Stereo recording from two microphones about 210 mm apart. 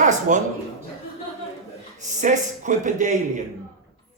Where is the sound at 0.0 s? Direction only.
35° right (ahead or behind).